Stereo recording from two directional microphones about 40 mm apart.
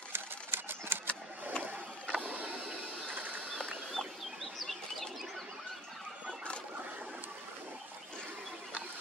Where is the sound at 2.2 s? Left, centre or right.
Right.